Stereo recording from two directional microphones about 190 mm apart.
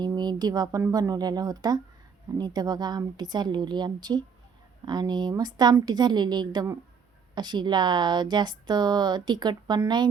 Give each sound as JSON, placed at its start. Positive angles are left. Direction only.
{"t": 0.0, "sound": "speech", "side_deg": -20}